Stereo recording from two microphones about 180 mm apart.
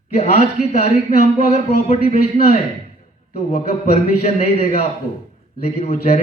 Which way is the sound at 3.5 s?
40° left (ahead or behind).